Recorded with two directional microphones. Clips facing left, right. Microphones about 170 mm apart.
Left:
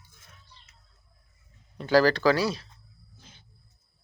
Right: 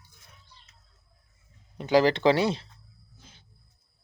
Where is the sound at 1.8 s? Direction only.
20° right (ahead or behind).